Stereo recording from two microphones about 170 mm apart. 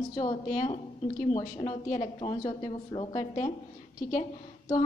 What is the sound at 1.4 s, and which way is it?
A woman's voice, 25° left (ahead or behind).